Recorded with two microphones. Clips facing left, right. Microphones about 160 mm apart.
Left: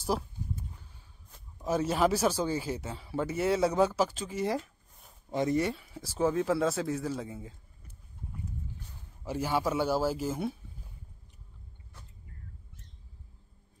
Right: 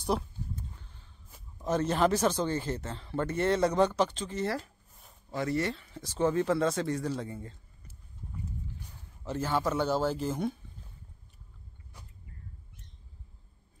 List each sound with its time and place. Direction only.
0.0 s a sound: 5° left (ahead or behind)
1.6 s speech: 10° left (ahead or behind)
9.2 s speech: 10° left (ahead or behind)